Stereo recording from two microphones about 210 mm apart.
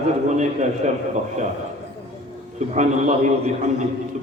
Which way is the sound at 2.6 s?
35° right (ahead or behind).